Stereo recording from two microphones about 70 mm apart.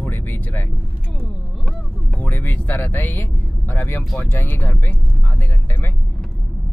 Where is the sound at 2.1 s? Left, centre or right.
Left.